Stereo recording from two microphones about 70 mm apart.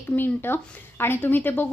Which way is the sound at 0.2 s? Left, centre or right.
Left.